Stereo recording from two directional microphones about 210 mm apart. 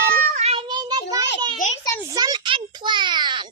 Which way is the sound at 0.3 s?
30° right (ahead or behind).